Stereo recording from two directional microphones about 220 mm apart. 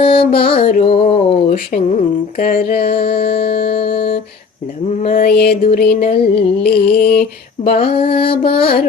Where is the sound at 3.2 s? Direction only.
25° left (ahead or behind).